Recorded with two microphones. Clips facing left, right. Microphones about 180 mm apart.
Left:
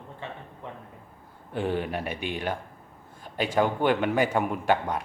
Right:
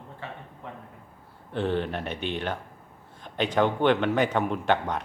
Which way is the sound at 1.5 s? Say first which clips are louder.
Right 1 dB; 10° left (ahead or behind).